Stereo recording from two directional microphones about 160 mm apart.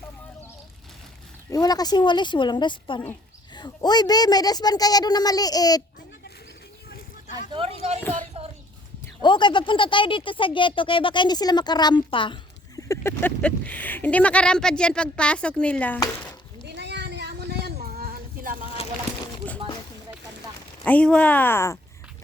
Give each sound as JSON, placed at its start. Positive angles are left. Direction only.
{"t": 1.5, "sound": "speech", "side_deg": 25}
{"t": 7.3, "sound": "speech", "side_deg": -35}
{"t": 8.4, "sound": "a sound", "side_deg": -35}
{"t": 9.2, "sound": "speech", "side_deg": 30}
{"t": 12.9, "sound": "speech", "side_deg": 15}
{"t": 16.6, "sound": "a sound", "side_deg": -90}
{"t": 20.8, "sound": "speech", "side_deg": 10}